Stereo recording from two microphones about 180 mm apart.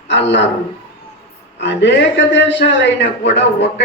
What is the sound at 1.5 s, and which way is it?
A man's voice, 80° left.